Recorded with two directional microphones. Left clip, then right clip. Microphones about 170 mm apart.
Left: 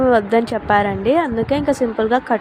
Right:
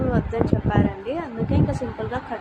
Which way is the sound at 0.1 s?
50° left (ahead or behind).